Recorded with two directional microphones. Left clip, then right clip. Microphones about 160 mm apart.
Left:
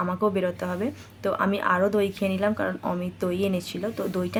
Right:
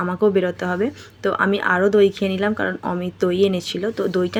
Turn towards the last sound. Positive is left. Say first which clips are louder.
# right 8 dB
turn(degrees=-15)  # may be behind; listen again after turning